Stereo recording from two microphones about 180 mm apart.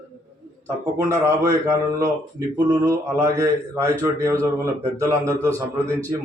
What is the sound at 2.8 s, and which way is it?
A man's voice, 15° right (ahead or behind).